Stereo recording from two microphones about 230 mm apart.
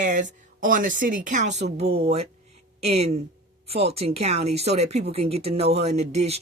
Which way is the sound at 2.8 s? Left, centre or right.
Right.